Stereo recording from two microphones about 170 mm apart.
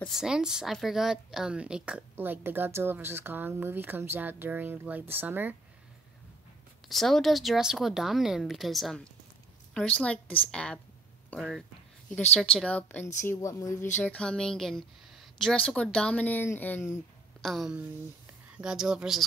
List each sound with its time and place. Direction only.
0.0 s a woman's voice: centre (ahead or behind)
6.9 s a woman's voice: centre (ahead or behind); by 13.8 s 20° left (ahead or behind)
14.0 s speech: 5° left (ahead or behind)
17.4 s a woman's voice: centre (ahead or behind)